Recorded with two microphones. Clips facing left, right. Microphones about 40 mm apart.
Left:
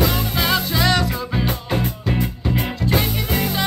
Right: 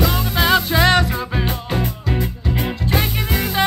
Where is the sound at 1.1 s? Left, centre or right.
Centre.